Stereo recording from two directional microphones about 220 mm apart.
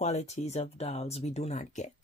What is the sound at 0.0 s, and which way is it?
Speech, 30° left (ahead or behind).